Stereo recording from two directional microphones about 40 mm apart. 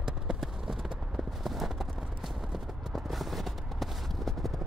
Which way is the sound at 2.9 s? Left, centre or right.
Centre.